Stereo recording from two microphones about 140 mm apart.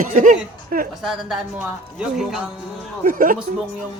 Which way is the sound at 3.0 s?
80° right.